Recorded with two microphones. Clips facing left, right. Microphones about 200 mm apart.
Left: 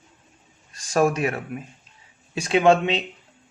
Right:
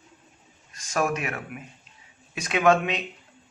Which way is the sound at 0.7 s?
35° left (ahead or behind).